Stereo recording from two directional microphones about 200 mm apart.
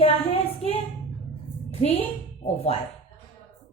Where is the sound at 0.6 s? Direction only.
Centre (ahead or behind).